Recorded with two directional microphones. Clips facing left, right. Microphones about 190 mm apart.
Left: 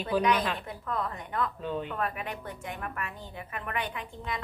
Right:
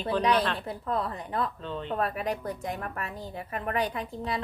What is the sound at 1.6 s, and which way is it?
Speech, 10° left (ahead or behind).